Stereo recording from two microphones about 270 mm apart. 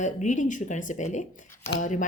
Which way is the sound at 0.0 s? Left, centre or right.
Left.